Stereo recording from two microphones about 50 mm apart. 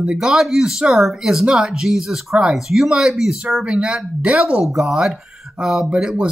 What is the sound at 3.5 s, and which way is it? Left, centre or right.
Speech, centre.